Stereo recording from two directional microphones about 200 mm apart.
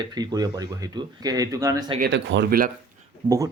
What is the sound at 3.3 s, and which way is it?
Speech, 15° right (ahead or behind).